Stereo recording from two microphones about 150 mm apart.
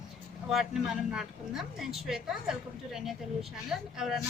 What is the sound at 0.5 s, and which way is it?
A woman's voice, centre (ahead or behind).